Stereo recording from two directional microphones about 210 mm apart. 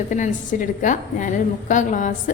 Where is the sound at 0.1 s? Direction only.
40° left (ahead or behind).